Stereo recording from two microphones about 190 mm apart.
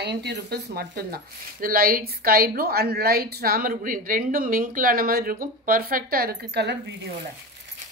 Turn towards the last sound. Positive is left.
turn(degrees=-55)  # may be behind; listen again after turning